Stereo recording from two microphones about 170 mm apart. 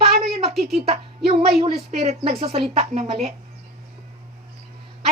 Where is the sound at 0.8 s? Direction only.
35° right (ahead or behind).